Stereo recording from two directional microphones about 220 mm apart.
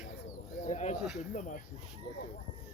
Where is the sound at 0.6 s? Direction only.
30° left (ahead or behind).